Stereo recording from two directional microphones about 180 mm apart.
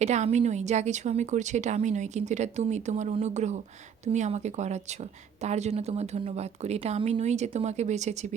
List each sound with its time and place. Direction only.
0.0 s a woman's voice: 40° right (ahead or behind)